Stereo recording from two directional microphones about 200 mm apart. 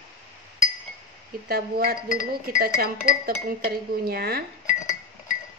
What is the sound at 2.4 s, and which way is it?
Speech, 50° right (ahead or behind).